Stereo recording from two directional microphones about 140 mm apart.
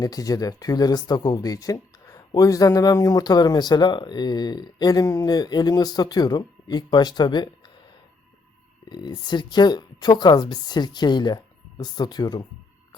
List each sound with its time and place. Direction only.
0.0 s speech: 25° left (ahead or behind)
8.9 s speech: 30° left (ahead or behind)